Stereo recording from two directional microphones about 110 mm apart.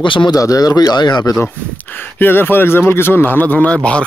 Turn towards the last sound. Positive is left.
turn(degrees=10)  # may be behind; listen again after turning